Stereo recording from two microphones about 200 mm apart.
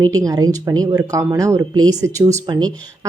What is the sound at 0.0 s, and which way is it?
A woman's voice, 15° right (ahead or behind).